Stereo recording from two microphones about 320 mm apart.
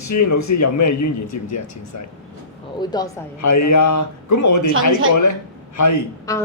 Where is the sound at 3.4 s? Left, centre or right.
Left.